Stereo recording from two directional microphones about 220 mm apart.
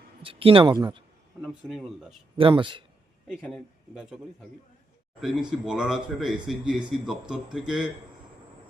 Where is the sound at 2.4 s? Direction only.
25° right (ahead or behind).